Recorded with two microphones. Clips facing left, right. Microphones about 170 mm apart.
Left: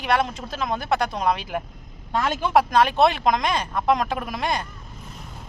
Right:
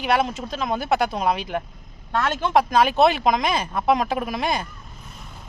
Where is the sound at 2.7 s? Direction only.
Centre (ahead or behind).